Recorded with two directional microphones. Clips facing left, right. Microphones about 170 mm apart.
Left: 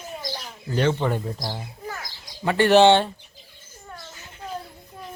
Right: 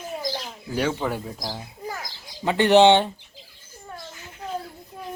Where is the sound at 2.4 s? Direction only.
20° right (ahead or behind).